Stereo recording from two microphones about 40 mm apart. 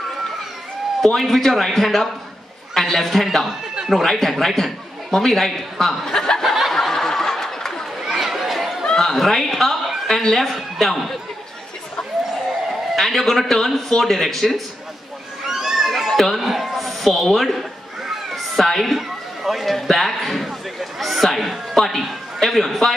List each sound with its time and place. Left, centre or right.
1.0 s a man's voice: centre
6.0 s speech: centre
6.4 s snicker: centre
6.7 s snicker: centre
8.1 s a sound: centre
8.8 s chuckle: centre
9.1 s speech: centre
12.9 s a man's voice: centre
15.4 s a sound: centre
16.1 s a sound: centre
16.3 s a man's voice: centre
18.3 s a sound: centre
21.0 s a man's voice: centre